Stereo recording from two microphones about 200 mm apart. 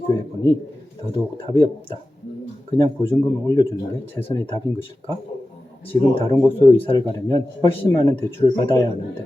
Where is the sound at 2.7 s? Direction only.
20° left (ahead or behind).